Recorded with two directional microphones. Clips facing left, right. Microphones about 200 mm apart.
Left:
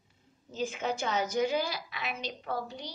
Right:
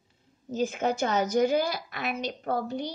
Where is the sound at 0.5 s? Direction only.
45° right (ahead or behind).